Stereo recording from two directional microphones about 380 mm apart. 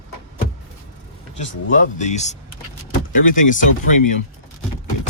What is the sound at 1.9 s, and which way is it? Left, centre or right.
Speech, centre.